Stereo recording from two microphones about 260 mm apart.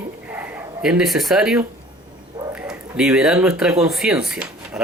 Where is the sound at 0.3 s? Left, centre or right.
Centre.